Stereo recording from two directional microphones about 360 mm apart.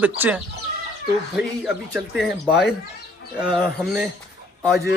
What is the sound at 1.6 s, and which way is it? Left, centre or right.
Speech, centre.